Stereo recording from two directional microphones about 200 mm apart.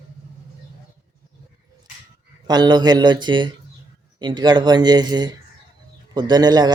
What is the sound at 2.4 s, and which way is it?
A man's voice, 20° right (ahead or behind).